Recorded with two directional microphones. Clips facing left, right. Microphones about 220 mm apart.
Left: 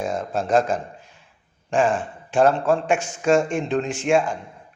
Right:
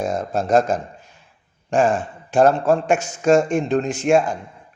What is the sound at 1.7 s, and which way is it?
A man's voice, 40° right (ahead or behind).